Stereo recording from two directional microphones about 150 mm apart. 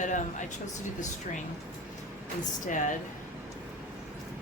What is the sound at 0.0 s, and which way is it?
Speech, 55° left (ahead or behind).